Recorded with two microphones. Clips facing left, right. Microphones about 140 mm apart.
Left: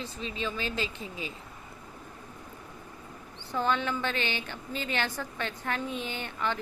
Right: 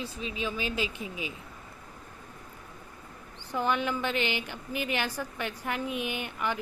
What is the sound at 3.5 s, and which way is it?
A woman's voice, 15° right (ahead or behind).